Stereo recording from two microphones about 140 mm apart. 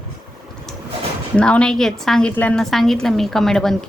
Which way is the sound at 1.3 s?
5° left (ahead or behind).